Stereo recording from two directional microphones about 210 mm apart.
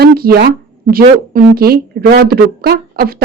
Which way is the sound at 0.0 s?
50° right (ahead or behind).